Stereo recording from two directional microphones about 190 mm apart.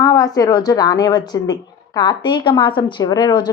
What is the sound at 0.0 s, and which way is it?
Speech, 20° left (ahead or behind).